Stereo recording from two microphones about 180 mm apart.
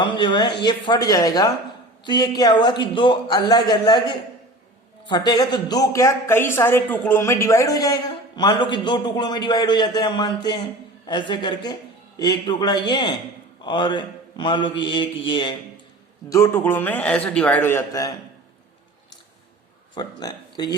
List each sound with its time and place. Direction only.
0.0 s speech: 25° left (ahead or behind)
16.3 s a man's voice: 15° left (ahead or behind)
19.9 s speech: 25° left (ahead or behind)